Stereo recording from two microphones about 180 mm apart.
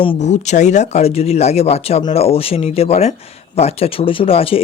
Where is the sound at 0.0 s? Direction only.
35° left (ahead or behind).